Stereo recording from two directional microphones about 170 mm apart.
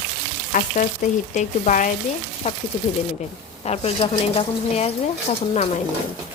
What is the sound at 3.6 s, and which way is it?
Speech, 35° left (ahead or behind).